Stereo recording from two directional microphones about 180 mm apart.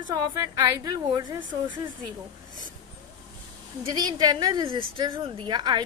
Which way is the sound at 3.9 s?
20° right (ahead or behind).